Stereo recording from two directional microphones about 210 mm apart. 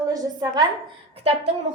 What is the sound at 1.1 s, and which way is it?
Speech, 30° right (ahead or behind).